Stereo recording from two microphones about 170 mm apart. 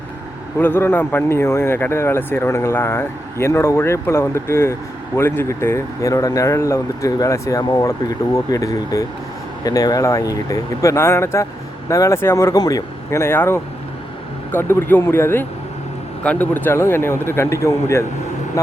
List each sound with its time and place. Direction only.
0.6 s speech: 10° left (ahead or behind)